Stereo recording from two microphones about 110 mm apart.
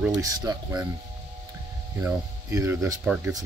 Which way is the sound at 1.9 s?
25° right (ahead or behind).